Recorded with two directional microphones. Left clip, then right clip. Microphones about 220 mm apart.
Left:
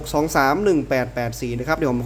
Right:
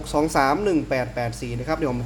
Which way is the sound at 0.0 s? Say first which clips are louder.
Left 2 dB; 15° left (ahead or behind).